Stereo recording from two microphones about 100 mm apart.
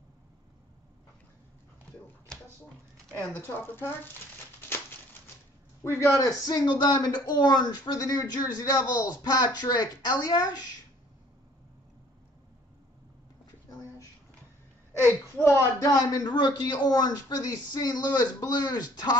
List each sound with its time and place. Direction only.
3.3 s speech: 20° left (ahead or behind)
5.9 s a man's voice: 30° left (ahead or behind)
15.3 s speech: 25° left (ahead or behind)
15.8 s a man's voice: 35° left (ahead or behind)